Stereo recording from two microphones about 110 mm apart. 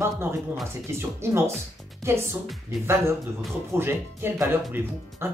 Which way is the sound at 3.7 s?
20° right (ahead or behind).